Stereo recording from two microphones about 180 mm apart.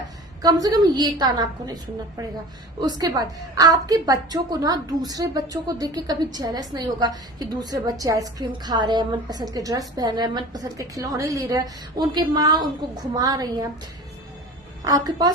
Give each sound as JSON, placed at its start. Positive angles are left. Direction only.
{"t": 0.4, "sound": "a woman's voice", "side_deg": -20}
{"t": 14.8, "sound": "a woman's voice", "side_deg": -20}